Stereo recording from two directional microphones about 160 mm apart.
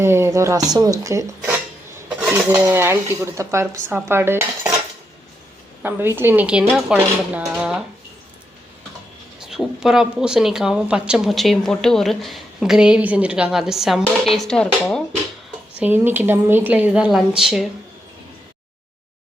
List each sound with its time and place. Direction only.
0.0 s speech: 15° right (ahead or behind)
2.0 s dishes: 5° right (ahead or behind)
2.3 s speech: 15° right (ahead or behind)
5.8 s speech: 15° right (ahead or behind)
9.4 s speech: 5° right (ahead or behind)
15.8 s speech: 15° right (ahead or behind)